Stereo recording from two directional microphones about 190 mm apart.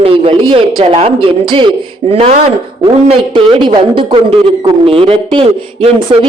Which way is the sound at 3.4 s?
25° right (ahead or behind).